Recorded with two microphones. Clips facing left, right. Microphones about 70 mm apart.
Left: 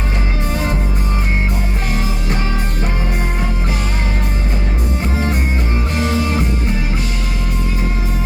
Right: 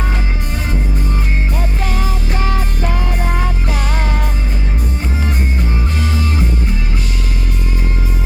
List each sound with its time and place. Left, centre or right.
6.0 s music: centre